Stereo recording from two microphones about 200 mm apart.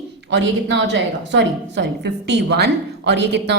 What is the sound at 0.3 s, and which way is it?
A woman's voice, 60° right (ahead or behind).